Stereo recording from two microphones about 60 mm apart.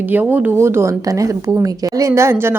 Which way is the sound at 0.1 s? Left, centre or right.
Right.